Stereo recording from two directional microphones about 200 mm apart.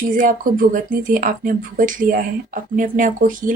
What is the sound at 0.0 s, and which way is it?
Speech, 40° right (ahead or behind).